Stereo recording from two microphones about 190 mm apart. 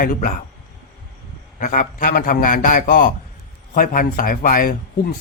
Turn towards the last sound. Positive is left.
turn(degrees=50)  # may be behind; listen again after turning